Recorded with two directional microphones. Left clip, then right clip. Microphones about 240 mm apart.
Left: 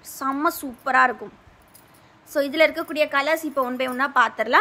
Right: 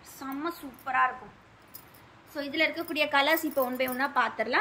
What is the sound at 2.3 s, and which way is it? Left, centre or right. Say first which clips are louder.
A woman's voice: left 9 dB; centre.